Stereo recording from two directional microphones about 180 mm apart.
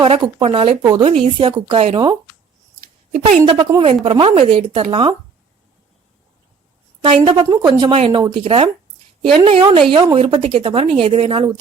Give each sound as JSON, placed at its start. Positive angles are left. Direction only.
{"t": 0.0, "sound": "speech", "side_deg": -30}
{"t": 0.8, "sound": "speech", "side_deg": -20}
{"t": 3.4, "sound": "speech", "side_deg": -30}
{"t": 7.0, "sound": "speech", "side_deg": -30}